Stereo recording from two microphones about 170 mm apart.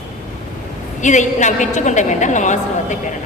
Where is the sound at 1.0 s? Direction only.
45° left (ahead or behind).